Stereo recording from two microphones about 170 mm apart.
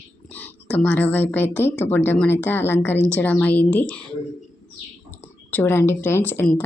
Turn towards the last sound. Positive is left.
turn(degrees=10)  # may be behind; listen again after turning